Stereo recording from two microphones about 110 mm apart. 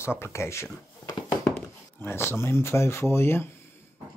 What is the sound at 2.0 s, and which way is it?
Speech, 20° left (ahead or behind).